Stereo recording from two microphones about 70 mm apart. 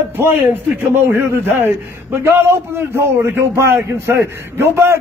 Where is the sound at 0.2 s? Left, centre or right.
Right.